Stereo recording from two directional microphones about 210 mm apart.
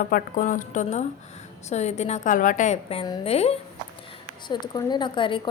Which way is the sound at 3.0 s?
25° left (ahead or behind).